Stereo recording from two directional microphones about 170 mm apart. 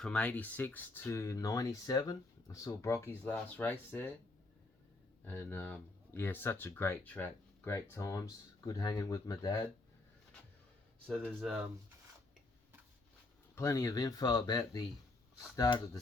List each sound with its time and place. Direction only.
0.0 s speech: 5° left (ahead or behind)
5.2 s speech: 10° left (ahead or behind)
11.0 s speech: 5° right (ahead or behind)
13.6 s speech: 20° left (ahead or behind)